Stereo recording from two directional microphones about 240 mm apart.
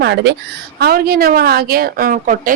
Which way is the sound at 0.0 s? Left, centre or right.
Right.